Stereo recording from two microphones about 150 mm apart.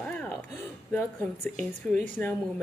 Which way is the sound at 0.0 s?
10° left (ahead or behind).